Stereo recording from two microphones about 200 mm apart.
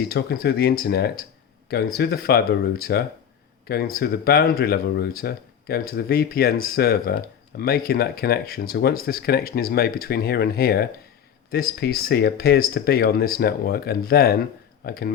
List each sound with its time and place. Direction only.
0.1 s speech: 50° left (ahead or behind)